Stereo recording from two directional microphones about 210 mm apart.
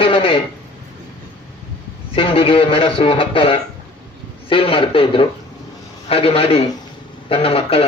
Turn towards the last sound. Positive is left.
turn(degrees=30)  # may be behind; listen again after turning